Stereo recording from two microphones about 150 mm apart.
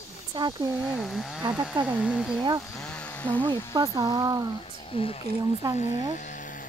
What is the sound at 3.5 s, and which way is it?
Speech, 30° right (ahead or behind).